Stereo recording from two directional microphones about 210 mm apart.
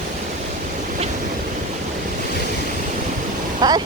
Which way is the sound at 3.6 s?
20° right (ahead or behind).